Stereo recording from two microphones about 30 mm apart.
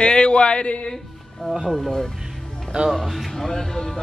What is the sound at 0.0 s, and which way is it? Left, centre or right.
Speech, left.